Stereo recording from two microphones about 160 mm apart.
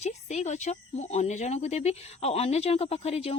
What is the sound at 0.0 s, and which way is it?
Speech, 45° left (ahead or behind).